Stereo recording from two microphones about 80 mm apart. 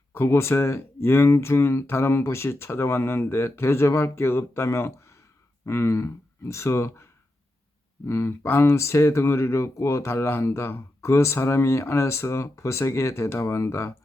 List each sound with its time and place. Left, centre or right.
0.1 s speech: left